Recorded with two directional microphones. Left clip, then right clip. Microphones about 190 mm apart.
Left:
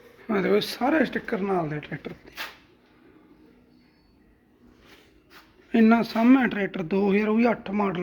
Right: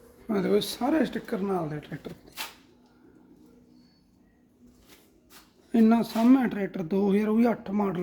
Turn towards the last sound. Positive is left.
turn(degrees=-15)  # may be behind; listen again after turning